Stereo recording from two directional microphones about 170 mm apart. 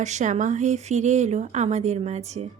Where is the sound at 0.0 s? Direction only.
45° right (ahead or behind).